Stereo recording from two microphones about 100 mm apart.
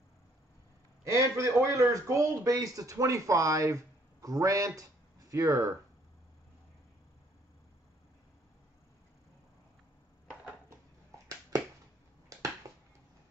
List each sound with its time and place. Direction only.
1.0 s a man's voice: 30° right (ahead or behind)